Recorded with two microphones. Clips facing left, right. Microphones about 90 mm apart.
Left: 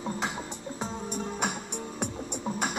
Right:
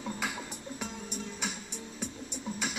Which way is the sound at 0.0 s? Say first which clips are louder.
Left 4 dB; 25° left (ahead or behind).